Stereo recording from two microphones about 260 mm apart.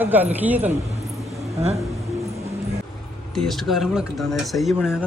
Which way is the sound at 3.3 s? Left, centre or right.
Centre.